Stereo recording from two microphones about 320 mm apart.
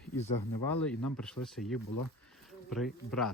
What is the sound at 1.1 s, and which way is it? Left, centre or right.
Speech, centre.